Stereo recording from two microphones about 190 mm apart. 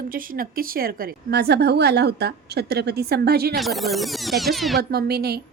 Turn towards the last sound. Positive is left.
turn(degrees=-55)  # may be behind; listen again after turning